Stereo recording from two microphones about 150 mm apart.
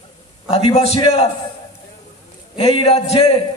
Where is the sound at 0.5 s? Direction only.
40° left (ahead or behind).